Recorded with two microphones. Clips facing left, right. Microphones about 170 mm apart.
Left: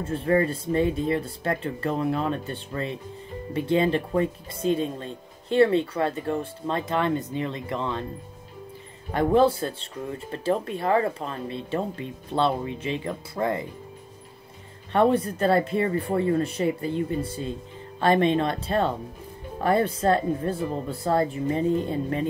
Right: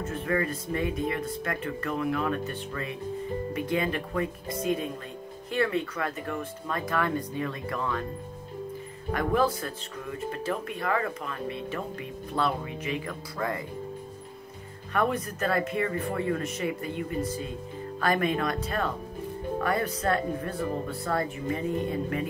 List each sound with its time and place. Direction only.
0.0 s speech: 30° left (ahead or behind)
9.1 s speech: 30° left (ahead or behind)
14.9 s speech: 30° left (ahead or behind)